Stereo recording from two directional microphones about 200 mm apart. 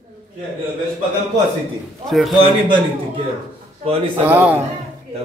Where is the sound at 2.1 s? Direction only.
Centre (ahead or behind).